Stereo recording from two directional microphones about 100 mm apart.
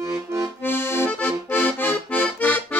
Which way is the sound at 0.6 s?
25° left (ahead or behind).